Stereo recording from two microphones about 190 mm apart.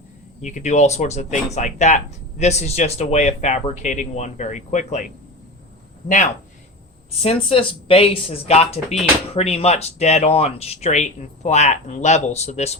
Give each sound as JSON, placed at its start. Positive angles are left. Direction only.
{"t": 0.4, "sound": "speech", "side_deg": 40}
{"t": 7.2, "sound": "speech", "side_deg": 30}